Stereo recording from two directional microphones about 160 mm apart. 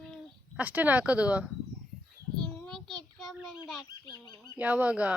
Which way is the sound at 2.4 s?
5° left (ahead or behind).